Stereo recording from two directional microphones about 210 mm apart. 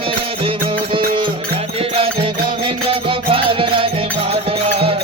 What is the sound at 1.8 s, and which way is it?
Music, 25° right (ahead or behind).